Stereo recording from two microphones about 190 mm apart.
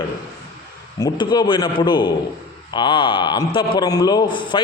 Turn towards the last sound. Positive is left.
turn(degrees=25)  # may be behind; listen again after turning